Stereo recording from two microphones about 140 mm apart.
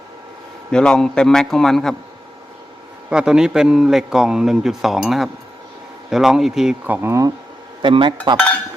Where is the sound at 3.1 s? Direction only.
5° right (ahead or behind); by 7.3 s 20° right (ahead or behind).